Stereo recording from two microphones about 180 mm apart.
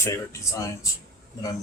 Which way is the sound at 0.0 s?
15° left (ahead or behind).